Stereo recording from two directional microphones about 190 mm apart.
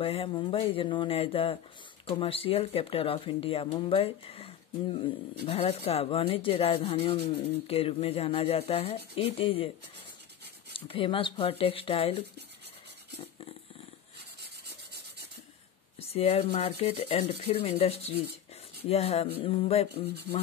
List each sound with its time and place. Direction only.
0.0 s speech: 30° left (ahead or behind)
10.7 s speech: 30° left (ahead or behind)
14.7 s rub: 60° right (ahead or behind)
16.0 s speech: 30° left (ahead or behind)